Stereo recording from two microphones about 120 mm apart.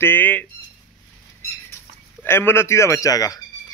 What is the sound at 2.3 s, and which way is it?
A man's voice, 20° left (ahead or behind).